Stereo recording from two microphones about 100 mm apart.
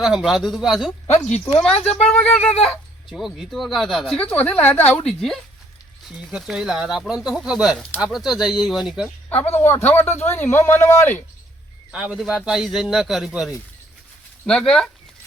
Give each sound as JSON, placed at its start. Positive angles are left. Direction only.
{"t": 0.0, "sound": "a man's voice", "side_deg": -5}
{"t": 2.4, "sound": "a sound", "side_deg": 90}
{"t": 2.6, "sound": "a man's voice", "side_deg": 0}
{"t": 4.4, "sound": "speech", "side_deg": 15}
{"t": 5.0, "sound": "a man's voice", "side_deg": 5}
{"t": 6.3, "sound": "a man's voice", "side_deg": -5}
{"t": 9.6, "sound": "speech", "side_deg": 25}
{"t": 11.9, "sound": "a man's voice", "side_deg": -5}
{"t": 14.4, "sound": "speech", "side_deg": 5}